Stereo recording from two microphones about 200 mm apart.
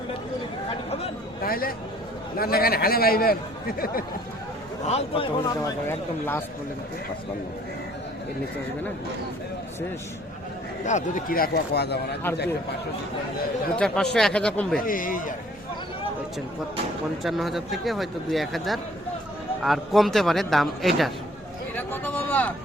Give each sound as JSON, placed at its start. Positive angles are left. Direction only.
{"t": 1.4, "sound": "a man's voice", "side_deg": 50}
{"t": 4.9, "sound": "speech", "side_deg": 30}
{"t": 5.9, "sound": "speech", "side_deg": 10}
{"t": 10.8, "sound": "a man's voice", "side_deg": 40}
{"t": 13.7, "sound": "speech", "side_deg": 5}
{"t": 14.8, "sound": "a man's voice", "side_deg": 45}
{"t": 17.2, "sound": "speech", "side_deg": 0}
{"t": 21.8, "sound": "a sound", "side_deg": 10}